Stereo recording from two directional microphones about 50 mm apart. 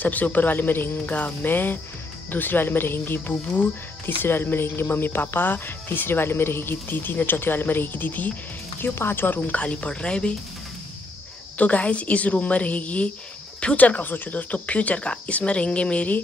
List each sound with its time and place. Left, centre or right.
0.0 s speech: left
8.7 s speech: left
9.5 s speech: left
11.5 s speech: left